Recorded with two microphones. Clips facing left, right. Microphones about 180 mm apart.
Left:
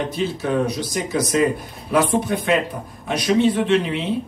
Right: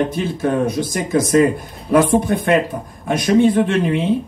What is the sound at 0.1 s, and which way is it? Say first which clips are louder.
A man's voice: right 3 dB; 50° right (ahead or behind).